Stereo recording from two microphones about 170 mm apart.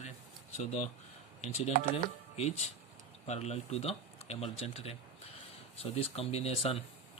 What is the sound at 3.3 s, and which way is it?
Speech, 40° left (ahead or behind).